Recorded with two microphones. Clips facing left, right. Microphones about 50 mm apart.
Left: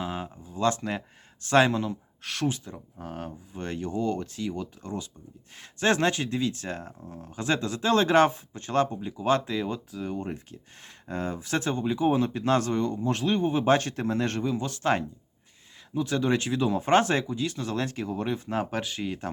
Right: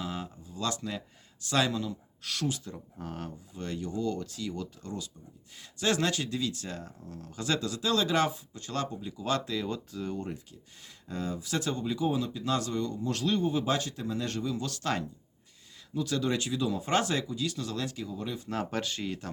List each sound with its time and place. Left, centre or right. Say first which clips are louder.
0.0 s speech: left 4 dB; left
2.7 s speech: left 2 dB; centre
3.5 s speech: left 4 dB; left; by 10.2 s centre
10.2 s speech: left 4 dB; left
18.4 s speech: left 3 dB; left